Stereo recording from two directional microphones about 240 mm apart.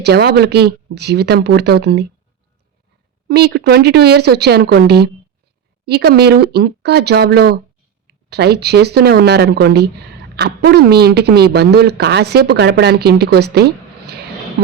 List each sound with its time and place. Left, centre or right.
0.0 s a woman's voice: right
3.2 s a woman's voice: right